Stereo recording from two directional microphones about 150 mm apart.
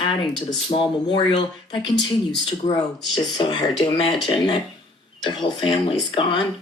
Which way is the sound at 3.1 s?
30° left (ahead or behind).